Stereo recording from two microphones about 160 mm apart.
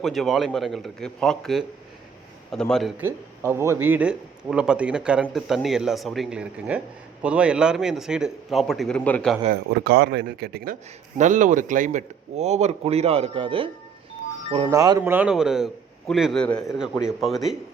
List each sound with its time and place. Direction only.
0.0 s a man's voice: centre (ahead or behind)
3.0 s a man's voice: 15° right (ahead or behind); by 9.3 s 10° left (ahead or behind)
9.8 s speech: 80° right
11.2 s a man's voice: 50° right (ahead or behind); by 13.7 s 35° right (ahead or behind)
14.7 s a man's voice: 20° right (ahead or behind); by 17.6 s centre (ahead or behind)